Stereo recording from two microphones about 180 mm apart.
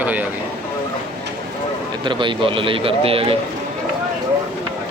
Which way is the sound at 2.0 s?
30° right (ahead or behind).